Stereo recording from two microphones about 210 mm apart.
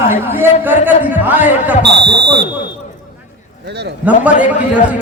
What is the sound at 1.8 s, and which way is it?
Speech, 55° right (ahead or behind).